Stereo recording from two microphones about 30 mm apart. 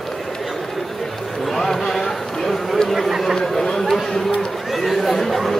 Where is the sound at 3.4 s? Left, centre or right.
Centre.